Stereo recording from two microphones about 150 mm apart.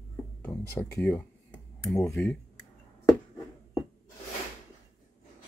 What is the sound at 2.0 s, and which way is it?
Speech, 15° left (ahead or behind).